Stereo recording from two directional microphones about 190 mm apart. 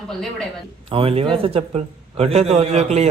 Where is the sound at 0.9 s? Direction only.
30° right (ahead or behind).